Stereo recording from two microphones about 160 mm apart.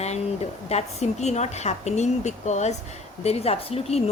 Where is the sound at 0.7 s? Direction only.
45° left (ahead or behind).